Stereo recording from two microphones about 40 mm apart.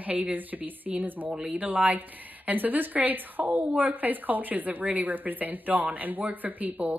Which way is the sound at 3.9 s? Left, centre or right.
Right.